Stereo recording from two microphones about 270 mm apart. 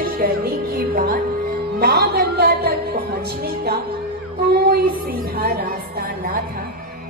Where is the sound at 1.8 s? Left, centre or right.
Right.